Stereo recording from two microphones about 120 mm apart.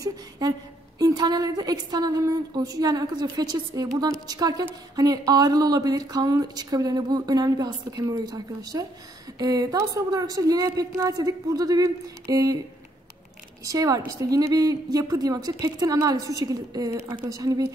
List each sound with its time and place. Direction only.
0.0 s a woman's voice: 35° right (ahead or behind)
13.7 s a woman's voice: 30° right (ahead or behind)